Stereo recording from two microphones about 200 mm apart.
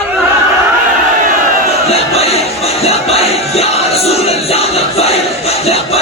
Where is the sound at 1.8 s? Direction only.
30° left (ahead or behind).